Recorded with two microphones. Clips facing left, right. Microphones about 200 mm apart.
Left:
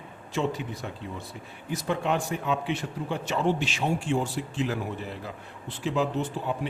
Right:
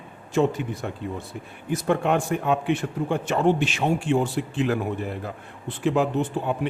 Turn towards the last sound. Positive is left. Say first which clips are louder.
# right 4 dB
turn(degrees=-55)  # may be behind; listen again after turning